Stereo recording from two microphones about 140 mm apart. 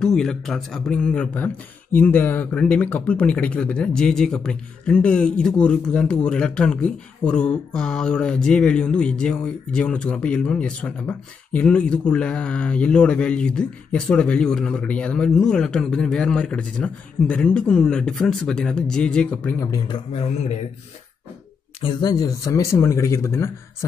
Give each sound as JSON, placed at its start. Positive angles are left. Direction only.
{"t": 0.0, "sound": "speech", "side_deg": 5}
{"t": 19.9, "sound": "a man's voice", "side_deg": 45}
{"t": 21.8, "sound": "speech", "side_deg": 30}